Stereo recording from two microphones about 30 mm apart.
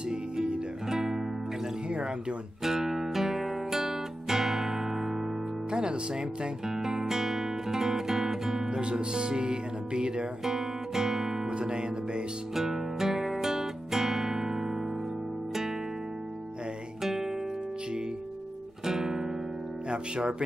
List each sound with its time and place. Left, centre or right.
0.8 s music: centre
1.9 s music: right
2.6 s music: centre
5.7 s music: right
6.7 s music: centre
8.6 s music: right
10.4 s music: centre
11.5 s music: right
12.5 s music: centre
17.0 s guitar: centre
18.9 s guitar: centre